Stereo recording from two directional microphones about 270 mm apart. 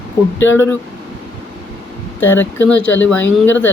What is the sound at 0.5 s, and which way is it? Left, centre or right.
Speech, centre.